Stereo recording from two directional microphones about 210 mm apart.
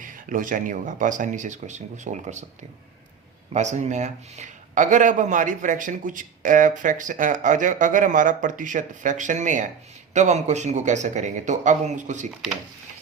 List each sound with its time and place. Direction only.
0.0 s speech: 40° right (ahead or behind)
3.5 s speech: 35° right (ahead or behind)